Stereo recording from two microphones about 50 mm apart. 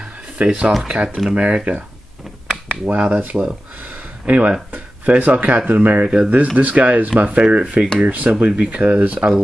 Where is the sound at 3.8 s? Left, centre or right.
Right.